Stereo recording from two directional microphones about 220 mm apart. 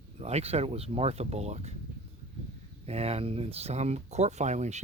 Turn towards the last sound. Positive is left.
turn(degrees=-30)  # may be behind; listen again after turning